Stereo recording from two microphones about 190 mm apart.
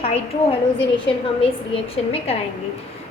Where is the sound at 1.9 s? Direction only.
30° left (ahead or behind).